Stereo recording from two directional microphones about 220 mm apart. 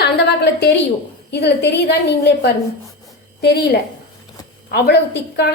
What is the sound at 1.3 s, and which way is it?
A woman's voice, 50° left (ahead or behind).